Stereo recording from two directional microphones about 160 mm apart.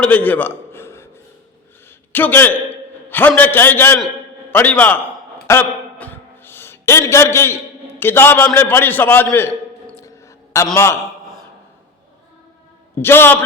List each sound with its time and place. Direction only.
0.0 s a sound: 10° left (ahead or behind)
2.1 s a man's voice: 10° left (ahead or behind)
5.5 s a sound: 10° left (ahead or behind)
8.5 s a man's voice: 15° left (ahead or behind)
10.8 s a man's voice: 15° left (ahead or behind)
13.0 s a man's voice: 15° left (ahead or behind)